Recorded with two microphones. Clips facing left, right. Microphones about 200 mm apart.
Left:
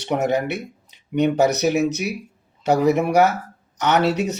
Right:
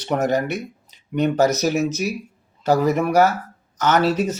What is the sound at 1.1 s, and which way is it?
Speech, 15° left (ahead or behind).